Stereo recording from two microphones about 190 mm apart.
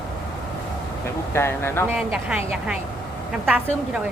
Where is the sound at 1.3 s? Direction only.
15° left (ahead or behind).